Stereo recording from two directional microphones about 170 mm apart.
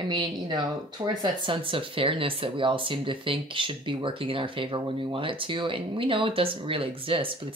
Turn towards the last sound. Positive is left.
turn(degrees=-30)  # may be behind; listen again after turning